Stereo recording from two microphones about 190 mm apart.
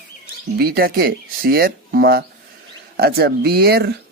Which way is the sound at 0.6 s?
50° right (ahead or behind).